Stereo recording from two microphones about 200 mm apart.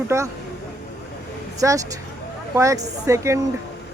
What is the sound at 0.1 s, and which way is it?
Speech, 15° right (ahead or behind).